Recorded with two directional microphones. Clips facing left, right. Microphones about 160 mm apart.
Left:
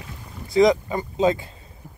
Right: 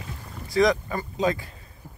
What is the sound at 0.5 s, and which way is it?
Speech, 20° left (ahead or behind).